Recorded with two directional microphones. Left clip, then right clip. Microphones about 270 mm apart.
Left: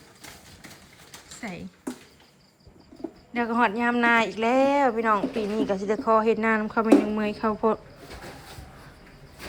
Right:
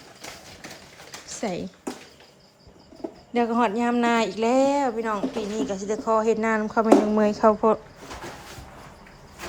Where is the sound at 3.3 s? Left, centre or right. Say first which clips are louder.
Right 1 dB; centre.